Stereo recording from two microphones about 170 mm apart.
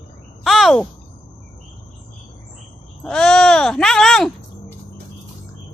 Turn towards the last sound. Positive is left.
turn(degrees=0)  # may be behind; listen again after turning